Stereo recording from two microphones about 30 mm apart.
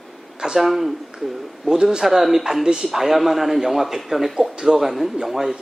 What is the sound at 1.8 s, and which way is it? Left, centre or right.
Speech, right.